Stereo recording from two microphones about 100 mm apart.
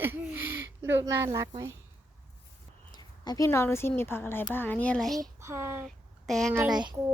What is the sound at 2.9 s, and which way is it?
Speech, 40° left (ahead or behind).